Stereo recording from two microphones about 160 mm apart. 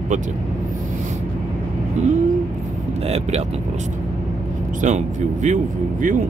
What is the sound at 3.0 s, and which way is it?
Speech, 40° right (ahead or behind).